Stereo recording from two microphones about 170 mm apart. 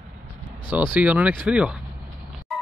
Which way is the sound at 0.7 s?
10° right (ahead or behind).